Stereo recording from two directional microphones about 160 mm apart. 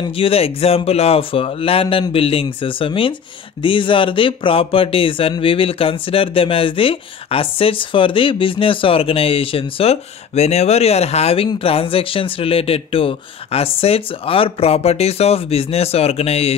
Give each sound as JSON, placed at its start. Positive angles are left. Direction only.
{"t": 0.0, "sound": "speech", "side_deg": 35}